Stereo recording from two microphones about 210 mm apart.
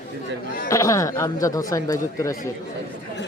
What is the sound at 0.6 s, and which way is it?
Speech, 15° left (ahead or behind).